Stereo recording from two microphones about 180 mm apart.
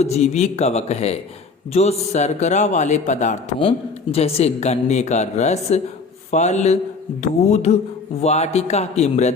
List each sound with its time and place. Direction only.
0.0 s a woman's voice: 35° left (ahead or behind)